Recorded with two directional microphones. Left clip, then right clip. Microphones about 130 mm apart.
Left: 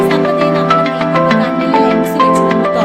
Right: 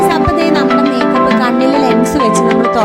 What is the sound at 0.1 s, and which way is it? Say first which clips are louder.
Music: right 1 dB; 55° right (ahead or behind).